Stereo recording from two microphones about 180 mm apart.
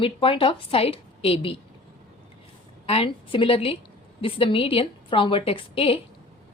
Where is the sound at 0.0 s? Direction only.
30° left (ahead or behind).